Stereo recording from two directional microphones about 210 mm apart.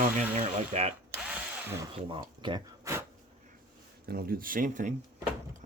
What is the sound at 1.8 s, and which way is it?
Speech, 20° right (ahead or behind).